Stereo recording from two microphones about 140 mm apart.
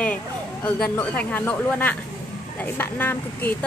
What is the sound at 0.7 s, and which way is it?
Speech, 5° left (ahead or behind).